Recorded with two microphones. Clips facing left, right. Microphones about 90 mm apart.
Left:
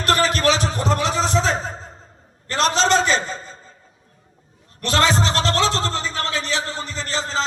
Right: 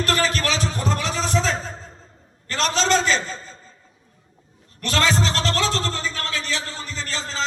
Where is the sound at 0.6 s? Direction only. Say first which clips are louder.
Left 4 dB; 20° left (ahead or behind).